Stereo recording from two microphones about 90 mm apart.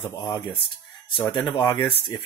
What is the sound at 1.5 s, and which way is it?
Speech, 55° left (ahead or behind).